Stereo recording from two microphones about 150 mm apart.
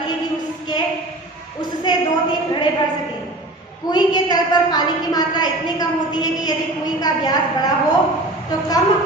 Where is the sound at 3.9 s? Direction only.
30° left (ahead or behind).